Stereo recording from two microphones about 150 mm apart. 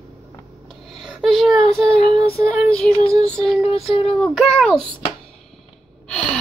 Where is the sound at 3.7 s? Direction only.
40° left (ahead or behind).